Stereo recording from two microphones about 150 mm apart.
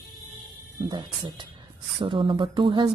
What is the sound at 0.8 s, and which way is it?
Speech, 30° right (ahead or behind).